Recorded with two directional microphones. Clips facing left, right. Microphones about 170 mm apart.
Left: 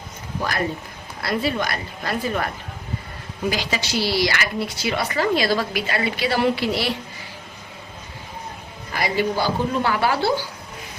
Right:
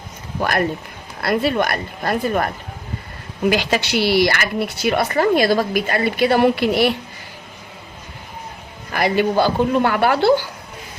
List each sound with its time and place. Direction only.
1.2 s speech: 55° right (ahead or behind)
3.5 s speech: 65° right (ahead or behind)
8.9 s speech: 55° right (ahead or behind)